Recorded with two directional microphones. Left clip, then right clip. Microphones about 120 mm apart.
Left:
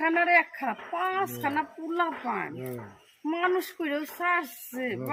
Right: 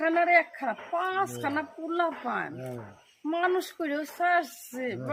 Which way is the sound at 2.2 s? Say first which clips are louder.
Even; 10° right (ahead or behind).